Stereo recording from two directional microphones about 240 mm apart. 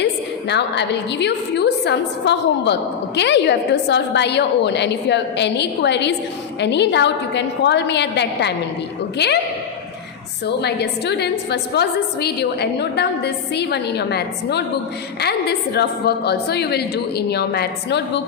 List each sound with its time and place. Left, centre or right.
0.0 s a woman's voice: left
10.4 s a woman's voice: left